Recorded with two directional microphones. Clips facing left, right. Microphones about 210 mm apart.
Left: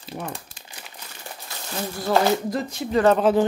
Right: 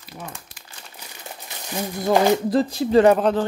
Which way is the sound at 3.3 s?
5° left (ahead or behind).